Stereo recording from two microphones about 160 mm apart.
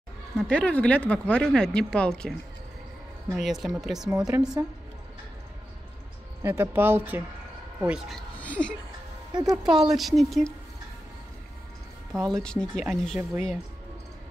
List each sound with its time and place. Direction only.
0.4 s speech: 5° left (ahead or behind)
3.3 s speech: centre (ahead or behind)
4.3 s a woman's voice: 20° right (ahead or behind)
6.4 s speech: 15° right (ahead or behind)
8.4 s a sound: 10° left (ahead or behind)
9.3 s speech: 25° right (ahead or behind)
9.6 s speech: 5° right (ahead or behind)
12.1 s a woman's voice: 20° right (ahead or behind)
12.4 s speech: 5° left (ahead or behind)